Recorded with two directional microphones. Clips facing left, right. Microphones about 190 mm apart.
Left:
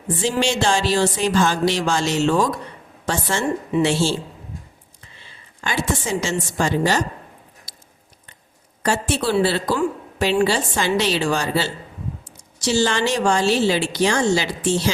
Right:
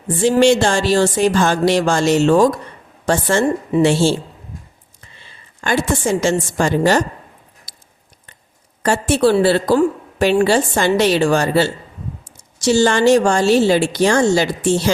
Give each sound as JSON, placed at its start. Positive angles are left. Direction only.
{"t": 0.2, "sound": "a woman's voice", "side_deg": -50}
{"t": 5.6, "sound": "a woman's voice", "side_deg": -50}
{"t": 8.8, "sound": "a woman's voice", "side_deg": -50}